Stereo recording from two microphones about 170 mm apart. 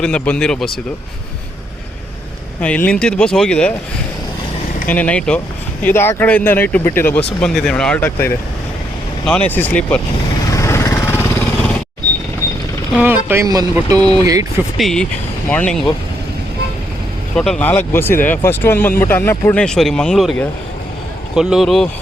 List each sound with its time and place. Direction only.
0.0 s speech: 5° left (ahead or behind)
2.6 s speech: 5° left (ahead or behind)
4.9 s speech: 10° left (ahead or behind)
10.5 s vehicle: 15° left (ahead or behind)
12.9 s speech: 10° right (ahead or behind)
14.8 s speech: centre (ahead or behind)
17.3 s speech: 5° left (ahead or behind)
19.6 s speech: 5° left (ahead or behind)